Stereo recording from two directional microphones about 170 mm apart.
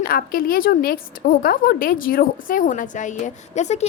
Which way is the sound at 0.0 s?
60° left (ahead or behind).